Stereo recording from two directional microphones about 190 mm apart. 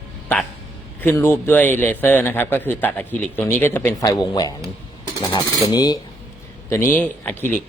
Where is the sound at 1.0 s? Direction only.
15° left (ahead or behind).